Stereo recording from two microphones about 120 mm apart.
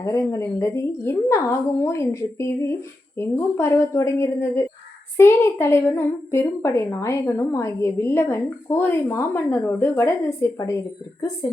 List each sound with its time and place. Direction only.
0.0 s a woman's voice: 25° left (ahead or behind)